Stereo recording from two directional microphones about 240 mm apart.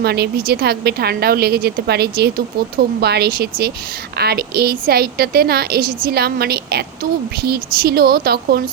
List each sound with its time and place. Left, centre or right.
0.0 s a woman's voice: right